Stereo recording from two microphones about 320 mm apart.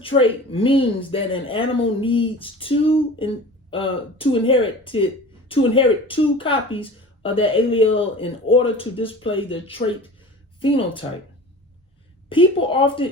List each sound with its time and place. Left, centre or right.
0.0 s speech: centre
12.3 s speech: centre